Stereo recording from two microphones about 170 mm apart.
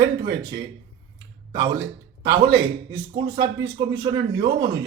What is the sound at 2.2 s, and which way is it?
A man's voice, 25° right (ahead or behind).